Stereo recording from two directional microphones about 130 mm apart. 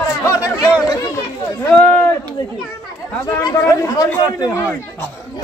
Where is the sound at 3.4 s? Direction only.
25° left (ahead or behind).